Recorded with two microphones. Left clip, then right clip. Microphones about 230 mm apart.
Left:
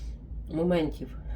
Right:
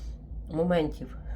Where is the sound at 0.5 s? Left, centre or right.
Centre.